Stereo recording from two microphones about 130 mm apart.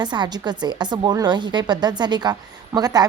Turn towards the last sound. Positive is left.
turn(degrees=-30)  # may be behind; listen again after turning